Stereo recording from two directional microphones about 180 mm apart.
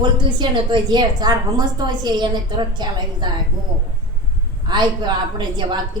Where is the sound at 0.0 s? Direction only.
25° right (ahead or behind).